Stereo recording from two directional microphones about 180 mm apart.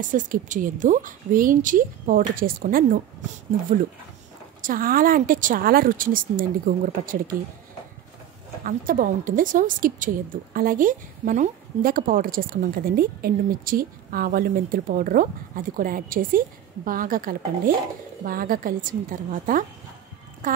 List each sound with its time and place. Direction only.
0.0 s a woman's voice: 45° right (ahead or behind)
4.6 s a woman's voice: 50° right (ahead or behind)
8.6 s a woman's voice: 50° right (ahead or behind)